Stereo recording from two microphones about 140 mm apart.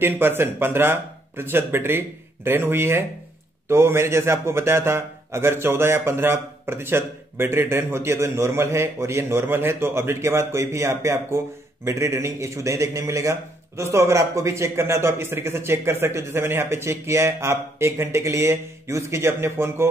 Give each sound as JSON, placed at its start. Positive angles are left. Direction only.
{"t": 0.0, "sound": "a man's voice", "side_deg": -15}